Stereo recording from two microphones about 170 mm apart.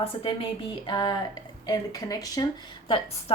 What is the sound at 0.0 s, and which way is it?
A woman's voice, 30° left (ahead or behind).